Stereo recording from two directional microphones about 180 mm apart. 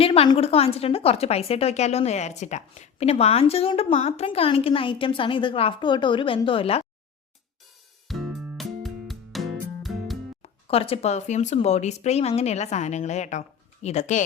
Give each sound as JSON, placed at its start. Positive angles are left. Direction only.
{"t": 0.0, "sound": "a woman's voice", "side_deg": 30}
{"t": 8.0, "sound": "music", "side_deg": 0}
{"t": 10.4, "sound": "a woman's voice", "side_deg": 30}